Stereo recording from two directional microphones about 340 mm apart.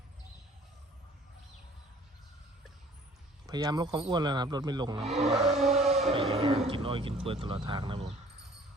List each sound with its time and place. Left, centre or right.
3.4 s speech: centre
5.5 s vehicle: centre
5.9 s speech: centre